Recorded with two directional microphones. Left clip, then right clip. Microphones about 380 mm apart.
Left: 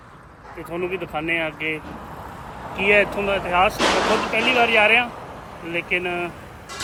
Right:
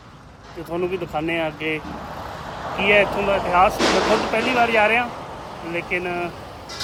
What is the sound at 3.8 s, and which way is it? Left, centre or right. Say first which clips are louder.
Speech: even; left.